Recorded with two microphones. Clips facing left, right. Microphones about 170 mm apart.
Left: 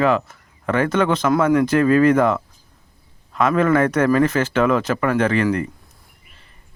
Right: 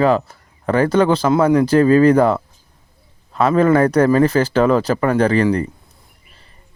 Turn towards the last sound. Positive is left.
turn(degrees=-35)  # may be behind; listen again after turning